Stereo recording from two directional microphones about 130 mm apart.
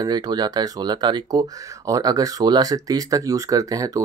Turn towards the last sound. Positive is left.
turn(degrees=-25)  # may be behind; listen again after turning